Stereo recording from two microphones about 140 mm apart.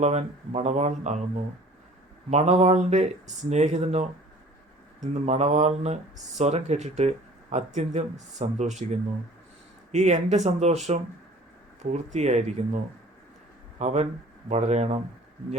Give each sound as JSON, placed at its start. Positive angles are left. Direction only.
{"t": 0.0, "sound": "speech", "side_deg": -50}
{"t": 2.3, "sound": "speech", "side_deg": -50}
{"t": 11.8, "sound": "speech", "side_deg": -55}